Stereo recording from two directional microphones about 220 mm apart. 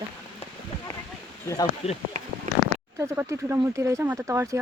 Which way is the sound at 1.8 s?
25° left (ahead or behind).